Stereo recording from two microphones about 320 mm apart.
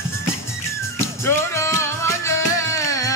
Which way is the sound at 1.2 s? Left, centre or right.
Centre.